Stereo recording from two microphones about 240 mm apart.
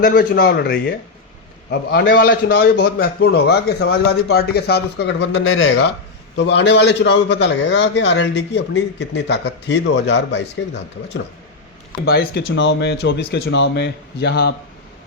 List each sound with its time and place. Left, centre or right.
0.0 s a man's voice: left